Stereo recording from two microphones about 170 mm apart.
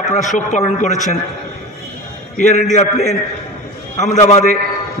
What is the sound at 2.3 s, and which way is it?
A man's voice, 45° left (ahead or behind).